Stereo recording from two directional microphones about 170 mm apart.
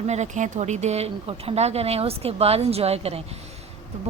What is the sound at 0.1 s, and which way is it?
Speech, 45° right (ahead or behind).